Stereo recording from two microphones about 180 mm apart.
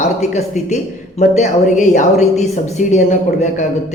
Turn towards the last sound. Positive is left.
turn(degrees=40)  # may be behind; listen again after turning